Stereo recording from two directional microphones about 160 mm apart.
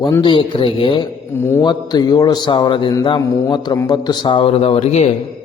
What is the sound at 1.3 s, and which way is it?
Speech, 15° left (ahead or behind).